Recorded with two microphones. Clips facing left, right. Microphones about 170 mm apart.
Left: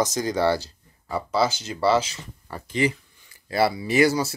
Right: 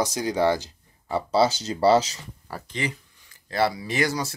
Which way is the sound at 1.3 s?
35° right (ahead or behind).